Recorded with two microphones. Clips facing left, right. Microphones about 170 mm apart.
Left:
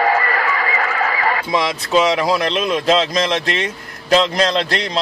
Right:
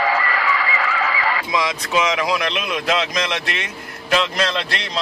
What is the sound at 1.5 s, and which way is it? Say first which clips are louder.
A man's voice: left 4 dB; 35° left (ahead or behind).